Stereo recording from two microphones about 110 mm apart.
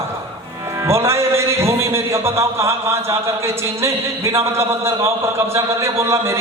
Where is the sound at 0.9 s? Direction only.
25° right (ahead or behind).